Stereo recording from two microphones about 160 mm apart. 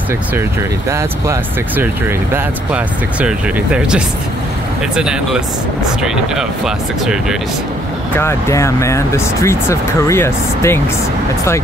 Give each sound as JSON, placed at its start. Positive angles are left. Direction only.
{"t": 0.8, "sound": "speech", "side_deg": -20}
{"t": 8.2, "sound": "speech", "side_deg": 15}